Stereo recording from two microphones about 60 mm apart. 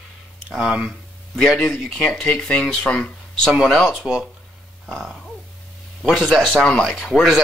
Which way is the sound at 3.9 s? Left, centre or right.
Centre.